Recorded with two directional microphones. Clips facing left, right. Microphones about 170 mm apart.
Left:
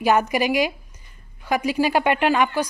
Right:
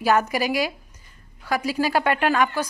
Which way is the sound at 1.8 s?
15° left (ahead or behind).